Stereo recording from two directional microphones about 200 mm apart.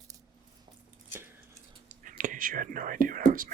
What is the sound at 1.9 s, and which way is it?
Whispering, 40° right (ahead or behind).